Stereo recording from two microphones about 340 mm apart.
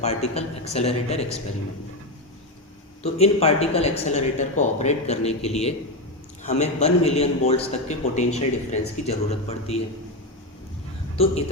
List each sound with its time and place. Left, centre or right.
0.0 s a man's voice: centre
3.0 s a man's voice: centre